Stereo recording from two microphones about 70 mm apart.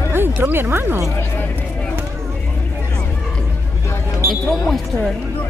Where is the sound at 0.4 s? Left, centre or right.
Right.